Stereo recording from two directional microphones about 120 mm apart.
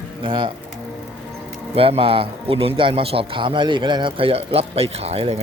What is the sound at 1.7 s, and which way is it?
Speech, 55° right (ahead or behind).